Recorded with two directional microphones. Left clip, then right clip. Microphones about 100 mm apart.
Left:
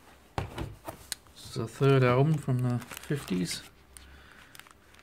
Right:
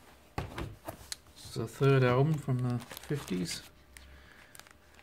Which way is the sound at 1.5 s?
15° left (ahead or behind).